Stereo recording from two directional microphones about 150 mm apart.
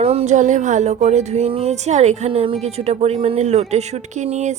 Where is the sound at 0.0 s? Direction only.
45° right (ahead or behind).